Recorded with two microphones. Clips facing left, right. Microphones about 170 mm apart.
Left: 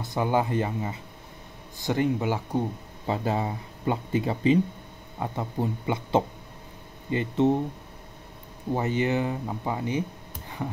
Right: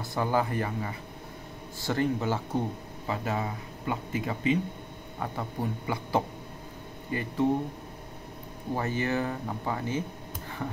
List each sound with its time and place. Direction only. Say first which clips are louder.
0.0 s speech: left 2 dB; 20° left (ahead or behind)
3.1 s speech: left 4 dB; 30° left (ahead or behind)
5.2 s speech: left 4 dB; 20° left (ahead or behind)
8.7 s speech: left 4 dB; 20° left (ahead or behind)